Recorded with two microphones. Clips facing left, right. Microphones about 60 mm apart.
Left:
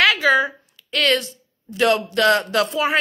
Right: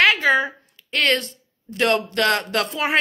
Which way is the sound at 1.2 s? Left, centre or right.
Right.